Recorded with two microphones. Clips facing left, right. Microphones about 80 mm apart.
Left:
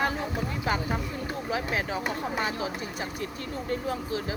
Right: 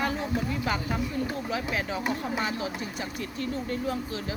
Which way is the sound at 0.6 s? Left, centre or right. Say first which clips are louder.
Even; left.